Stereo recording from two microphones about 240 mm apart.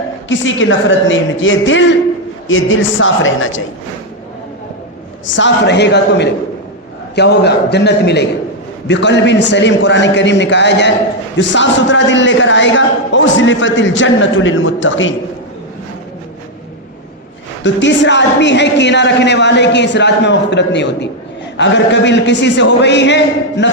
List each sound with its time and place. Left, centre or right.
0.3 s a man's voice: left
5.2 s a man's voice: left
17.6 s a man's voice: left